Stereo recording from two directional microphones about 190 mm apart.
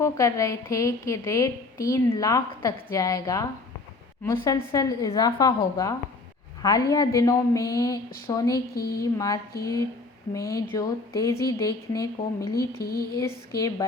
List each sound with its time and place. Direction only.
0.0 s a woman's voice: 15° left (ahead or behind)
8.7 s speech: 55° left (ahead or behind)
9.1 s a woman's voice: 20° left (ahead or behind)
12.5 s a sound: 55° left (ahead or behind)
13.6 s speech: 20° left (ahead or behind)